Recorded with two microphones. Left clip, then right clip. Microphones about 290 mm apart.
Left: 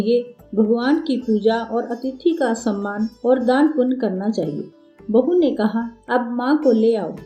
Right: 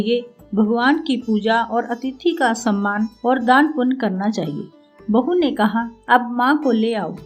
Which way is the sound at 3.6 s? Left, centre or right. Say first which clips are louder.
Even; right.